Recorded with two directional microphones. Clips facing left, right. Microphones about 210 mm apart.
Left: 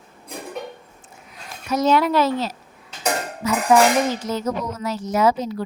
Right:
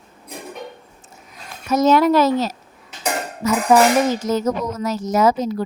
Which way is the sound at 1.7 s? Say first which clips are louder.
Right 4 dB; 45° right (ahead or behind).